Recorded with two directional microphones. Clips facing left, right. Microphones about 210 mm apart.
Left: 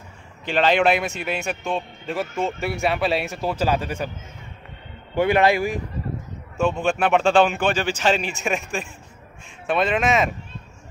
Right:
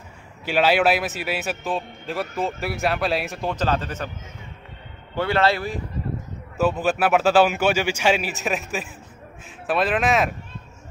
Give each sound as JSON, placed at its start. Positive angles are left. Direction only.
{"t": 0.5, "sound": "a man's voice", "side_deg": -5}
{"t": 5.1, "sound": "speech", "side_deg": 15}
{"t": 6.5, "sound": "a man's voice", "side_deg": -5}